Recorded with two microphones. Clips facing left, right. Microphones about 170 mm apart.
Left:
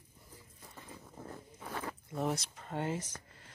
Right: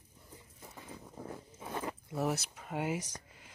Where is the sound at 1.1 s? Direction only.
10° right (ahead or behind).